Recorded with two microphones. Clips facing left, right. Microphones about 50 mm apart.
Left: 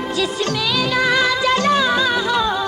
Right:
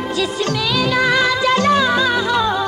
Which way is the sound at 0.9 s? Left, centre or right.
Right.